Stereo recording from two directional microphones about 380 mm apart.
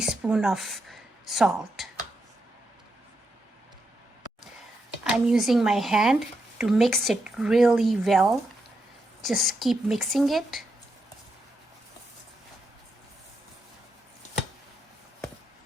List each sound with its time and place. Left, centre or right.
0.0 s a woman's voice: centre
5.0 s speech: centre